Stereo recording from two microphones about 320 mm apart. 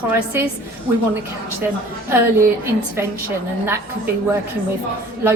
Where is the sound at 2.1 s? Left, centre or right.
Centre.